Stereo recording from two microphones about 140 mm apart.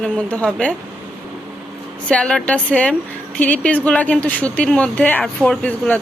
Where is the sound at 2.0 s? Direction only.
5° left (ahead or behind).